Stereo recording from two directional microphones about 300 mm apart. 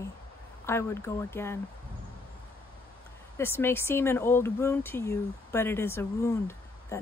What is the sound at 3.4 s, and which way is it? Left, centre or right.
Speech, centre.